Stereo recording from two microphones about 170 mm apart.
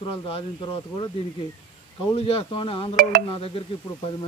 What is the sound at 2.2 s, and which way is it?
Speech, 30° left (ahead or behind).